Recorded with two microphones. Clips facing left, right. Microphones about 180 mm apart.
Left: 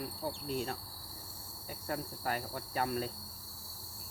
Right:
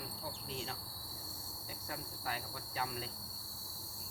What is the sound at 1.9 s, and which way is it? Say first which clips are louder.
Cricket: left 7 dB; 50° left (ahead or behind).